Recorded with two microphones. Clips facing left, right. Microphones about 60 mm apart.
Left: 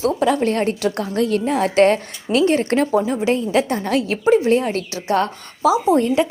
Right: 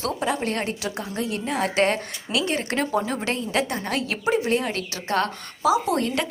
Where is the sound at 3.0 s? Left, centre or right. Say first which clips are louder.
Left 7 dB; left.